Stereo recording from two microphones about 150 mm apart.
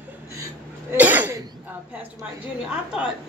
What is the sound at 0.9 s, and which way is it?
Throat clearing, 10° right (ahead or behind).